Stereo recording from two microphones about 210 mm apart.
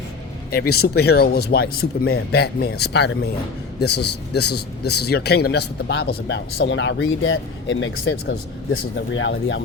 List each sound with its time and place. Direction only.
0.5 s speech: 45° left (ahead or behind); by 7.9 s 65° left (ahead or behind)
9.0 s speech: 60° left (ahead or behind)